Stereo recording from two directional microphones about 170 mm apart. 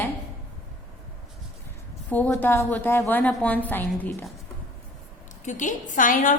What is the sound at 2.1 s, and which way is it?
A woman's voice, 10° left (ahead or behind).